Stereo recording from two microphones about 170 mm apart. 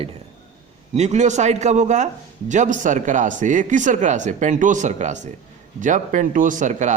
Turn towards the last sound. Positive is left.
turn(degrees=-45)  # may be behind; listen again after turning